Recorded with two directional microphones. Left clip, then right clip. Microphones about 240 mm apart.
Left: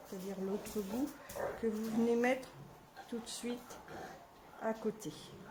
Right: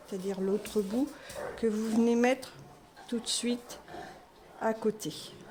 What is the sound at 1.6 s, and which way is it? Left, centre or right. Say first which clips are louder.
A woman's voice: right 10 dB; right.